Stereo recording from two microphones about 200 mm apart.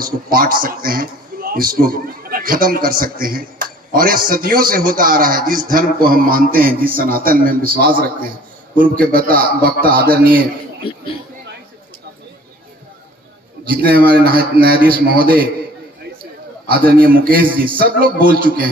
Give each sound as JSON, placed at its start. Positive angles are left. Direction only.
{"t": 0.0, "sound": "a man's voice", "side_deg": -45}
{"t": 13.7, "sound": "a man's voice", "side_deg": -50}
{"t": 16.6, "sound": "a man's voice", "side_deg": -50}